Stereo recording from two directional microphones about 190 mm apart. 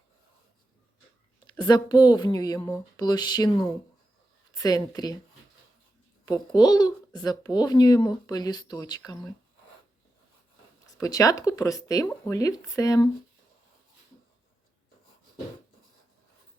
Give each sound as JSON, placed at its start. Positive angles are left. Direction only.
{"t": 1.5, "sound": "a child's voice", "side_deg": 20}
{"t": 6.2, "sound": "a child's voice", "side_deg": 20}
{"t": 10.9, "sound": "speech", "side_deg": 15}